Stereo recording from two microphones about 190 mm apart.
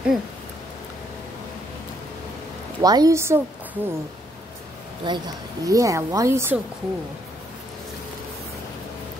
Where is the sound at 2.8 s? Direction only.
20° right (ahead or behind).